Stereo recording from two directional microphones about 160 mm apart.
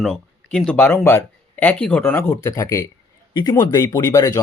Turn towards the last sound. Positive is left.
turn(degrees=25)  # may be behind; listen again after turning